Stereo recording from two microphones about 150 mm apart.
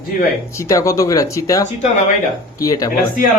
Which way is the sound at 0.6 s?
20° left (ahead or behind).